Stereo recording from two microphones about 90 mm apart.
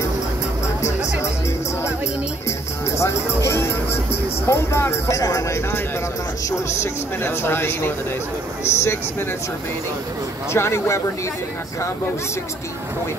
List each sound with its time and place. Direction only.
3.0 s speech: 30° left (ahead or behind)
10.5 s speech: 30° left (ahead or behind)